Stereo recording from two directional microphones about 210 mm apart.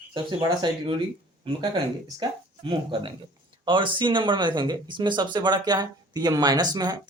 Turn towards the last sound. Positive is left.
turn(degrees=-20)  # may be behind; listen again after turning